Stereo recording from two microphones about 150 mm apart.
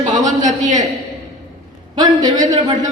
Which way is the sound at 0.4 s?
55° right (ahead or behind).